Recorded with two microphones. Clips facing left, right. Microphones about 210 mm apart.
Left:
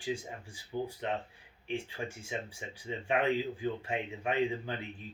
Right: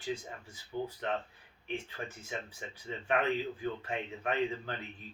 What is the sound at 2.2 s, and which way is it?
Speech, 10° left (ahead or behind).